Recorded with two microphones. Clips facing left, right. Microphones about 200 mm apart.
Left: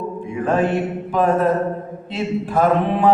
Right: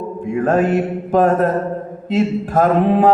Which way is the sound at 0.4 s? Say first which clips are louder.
Right 3 dB; 45° right (ahead or behind).